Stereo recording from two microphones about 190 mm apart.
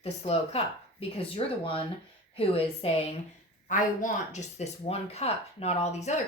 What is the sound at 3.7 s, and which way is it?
Speech, 45° left (ahead or behind).